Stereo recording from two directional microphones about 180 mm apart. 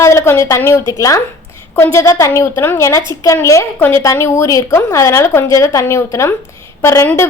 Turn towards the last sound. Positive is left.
turn(degrees=15)  # may be behind; listen again after turning